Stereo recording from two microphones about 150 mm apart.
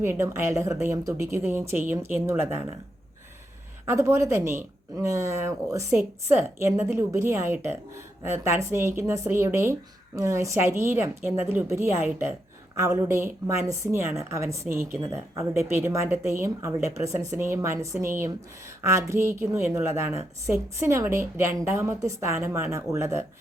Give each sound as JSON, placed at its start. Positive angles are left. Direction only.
{"t": 0.0, "sound": "a woman's voice", "side_deg": -15}
{"t": 3.8, "sound": "a woman's voice", "side_deg": -15}